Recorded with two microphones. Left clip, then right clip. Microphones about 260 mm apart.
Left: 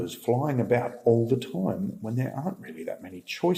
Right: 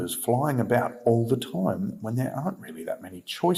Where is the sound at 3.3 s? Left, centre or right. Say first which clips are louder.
Right 1 dB; right.